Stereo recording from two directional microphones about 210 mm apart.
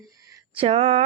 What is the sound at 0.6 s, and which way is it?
Speech, 30° right (ahead or behind).